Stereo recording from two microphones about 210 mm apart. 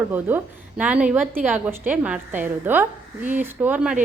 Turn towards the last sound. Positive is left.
turn(degrees=-5)  # may be behind; listen again after turning